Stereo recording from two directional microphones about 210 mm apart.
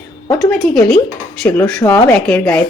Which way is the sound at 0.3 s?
Centre (ahead or behind).